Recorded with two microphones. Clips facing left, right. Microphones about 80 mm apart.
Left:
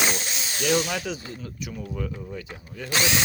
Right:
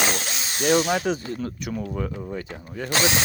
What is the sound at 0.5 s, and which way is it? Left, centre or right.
Speech, right.